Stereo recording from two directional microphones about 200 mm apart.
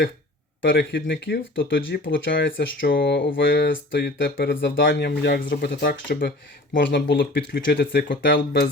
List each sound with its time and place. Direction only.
0.6 s speech: 65° left (ahead or behind)
6.7 s speech: 65° left (ahead or behind)